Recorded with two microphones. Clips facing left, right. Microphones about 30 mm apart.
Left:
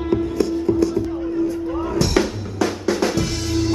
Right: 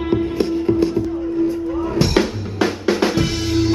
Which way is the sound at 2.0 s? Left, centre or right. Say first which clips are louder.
Right 2 dB; right.